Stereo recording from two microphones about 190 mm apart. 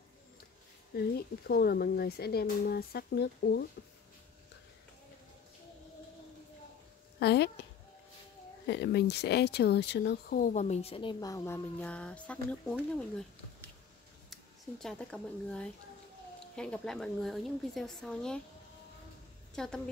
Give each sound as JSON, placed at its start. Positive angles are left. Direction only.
{"t": 0.9, "sound": "speech", "side_deg": 55}
{"t": 7.2, "sound": "speech", "side_deg": 60}
{"t": 8.6, "sound": "speech", "side_deg": 60}
{"t": 14.3, "sound": "a woman's voice", "side_deg": 0}
{"t": 19.5, "sound": "a woman's voice", "side_deg": 5}